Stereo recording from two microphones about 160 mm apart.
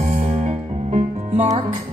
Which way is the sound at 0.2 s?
45° right (ahead or behind).